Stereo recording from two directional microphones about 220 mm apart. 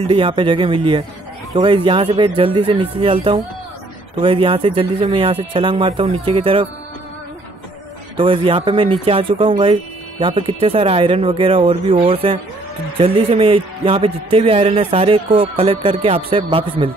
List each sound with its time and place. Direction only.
0.0 s a man's voice: 25° right (ahead or behind)
8.2 s a man's voice: 25° right (ahead or behind)